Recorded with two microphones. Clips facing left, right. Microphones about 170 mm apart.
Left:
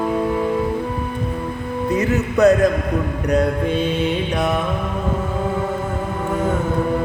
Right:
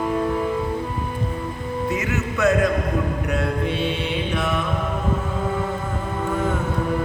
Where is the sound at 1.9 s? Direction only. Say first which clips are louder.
Left 6 dB; 35° left (ahead or behind).